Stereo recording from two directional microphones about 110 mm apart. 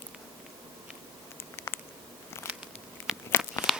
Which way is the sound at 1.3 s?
20° left (ahead or behind).